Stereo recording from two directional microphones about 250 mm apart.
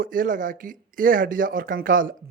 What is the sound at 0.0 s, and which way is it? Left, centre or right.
Speech, right.